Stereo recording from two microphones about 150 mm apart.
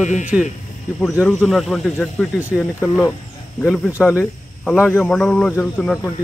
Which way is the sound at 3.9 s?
20° left (ahead or behind).